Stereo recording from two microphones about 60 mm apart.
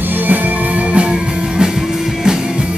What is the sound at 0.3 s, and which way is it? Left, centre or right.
Music, right.